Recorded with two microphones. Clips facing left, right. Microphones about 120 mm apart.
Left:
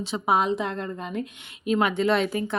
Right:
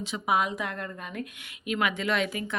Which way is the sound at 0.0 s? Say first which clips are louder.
Left 4 dB; 30° left (ahead or behind).